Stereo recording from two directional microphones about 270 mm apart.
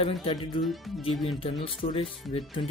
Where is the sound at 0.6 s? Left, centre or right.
Centre.